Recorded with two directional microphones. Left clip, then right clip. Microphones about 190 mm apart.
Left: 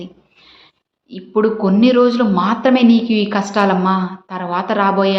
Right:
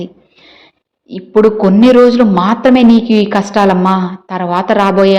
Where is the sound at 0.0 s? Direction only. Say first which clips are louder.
Right 8 dB; 30° right (ahead or behind).